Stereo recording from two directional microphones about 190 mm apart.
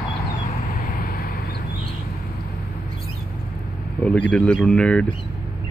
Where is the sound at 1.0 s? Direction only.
50° left (ahead or behind).